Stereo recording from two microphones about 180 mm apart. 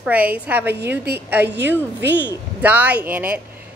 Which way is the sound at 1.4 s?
70° right (ahead or behind).